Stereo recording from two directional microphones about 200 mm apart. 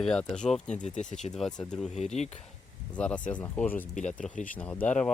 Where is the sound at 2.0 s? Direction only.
35° left (ahead or behind).